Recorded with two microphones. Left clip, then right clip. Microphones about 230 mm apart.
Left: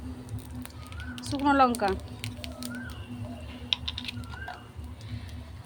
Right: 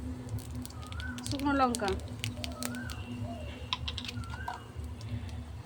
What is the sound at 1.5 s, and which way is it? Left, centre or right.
Speech, left.